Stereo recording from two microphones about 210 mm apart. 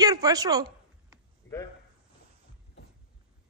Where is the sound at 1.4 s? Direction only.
65° left (ahead or behind).